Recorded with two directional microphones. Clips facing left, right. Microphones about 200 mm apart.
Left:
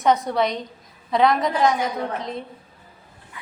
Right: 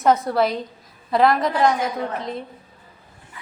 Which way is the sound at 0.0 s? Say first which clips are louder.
Right 2 dB; 5° right (ahead or behind).